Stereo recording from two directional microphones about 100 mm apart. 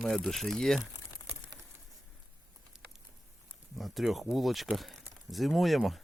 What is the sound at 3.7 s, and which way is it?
Speech, centre (ahead or behind).